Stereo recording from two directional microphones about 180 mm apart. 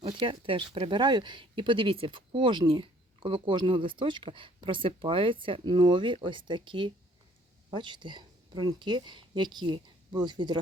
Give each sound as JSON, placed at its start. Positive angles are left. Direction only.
{"t": 0.0, "sound": "speech", "side_deg": -25}